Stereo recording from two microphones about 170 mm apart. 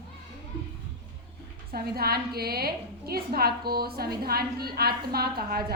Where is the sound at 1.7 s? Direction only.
65° right (ahead or behind).